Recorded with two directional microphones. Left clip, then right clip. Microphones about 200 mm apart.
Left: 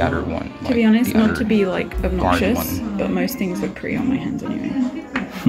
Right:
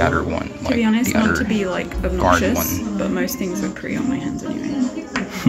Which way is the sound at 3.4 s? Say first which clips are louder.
Even; 40° left (ahead or behind).